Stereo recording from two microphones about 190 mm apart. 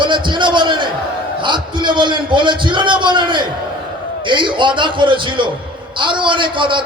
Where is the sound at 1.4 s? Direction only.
25° right (ahead or behind).